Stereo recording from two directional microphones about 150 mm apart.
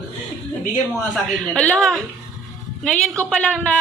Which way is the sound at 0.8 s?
5° left (ahead or behind).